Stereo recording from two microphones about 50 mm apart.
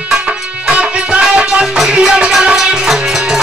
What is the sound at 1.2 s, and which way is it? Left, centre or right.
Music, centre.